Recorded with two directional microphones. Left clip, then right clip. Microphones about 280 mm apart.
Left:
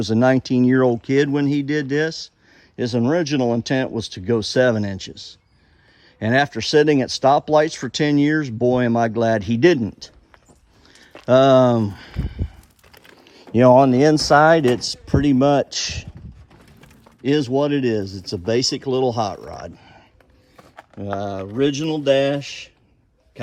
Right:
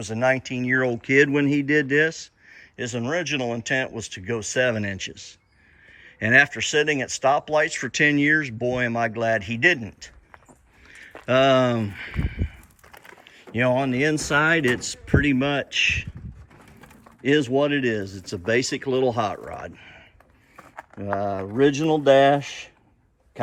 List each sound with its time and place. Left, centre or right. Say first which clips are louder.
0.0 s speech: left 5 dB; centre
12.9 s crumpling: right 2 dB; centre
13.2 s speech: left 9 dB; centre